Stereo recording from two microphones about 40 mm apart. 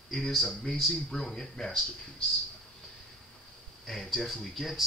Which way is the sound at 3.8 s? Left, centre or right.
Centre.